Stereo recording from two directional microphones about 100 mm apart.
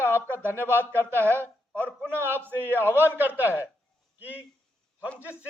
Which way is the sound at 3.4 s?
25° left (ahead or behind).